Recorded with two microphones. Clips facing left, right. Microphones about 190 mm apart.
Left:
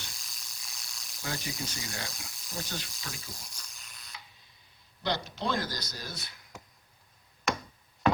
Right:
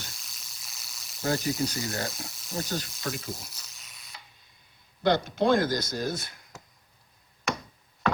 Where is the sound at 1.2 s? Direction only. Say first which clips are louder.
Right 10 dB; 40° right (ahead or behind).